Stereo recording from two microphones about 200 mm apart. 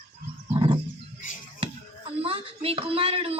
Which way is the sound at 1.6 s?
30° right (ahead or behind).